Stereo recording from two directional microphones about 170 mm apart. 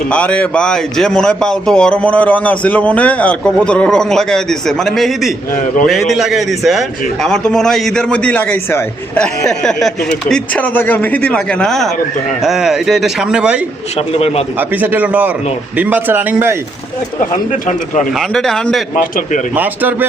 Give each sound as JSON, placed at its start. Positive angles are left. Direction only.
{"t": 0.1, "sound": "a man's voice", "side_deg": 5}
{"t": 5.5, "sound": "speech", "side_deg": 50}
{"t": 5.9, "sound": "a man's voice", "side_deg": 0}
{"t": 13.9, "sound": "speech", "side_deg": 35}
{"t": 14.6, "sound": "a man's voice", "side_deg": -10}
{"t": 17.7, "sound": "speech", "side_deg": 45}
{"t": 18.1, "sound": "a man's voice", "side_deg": 0}
{"t": 19.5, "sound": "a man's voice", "side_deg": -10}